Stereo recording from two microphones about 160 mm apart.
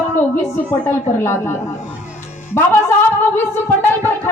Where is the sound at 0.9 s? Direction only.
15° left (ahead or behind).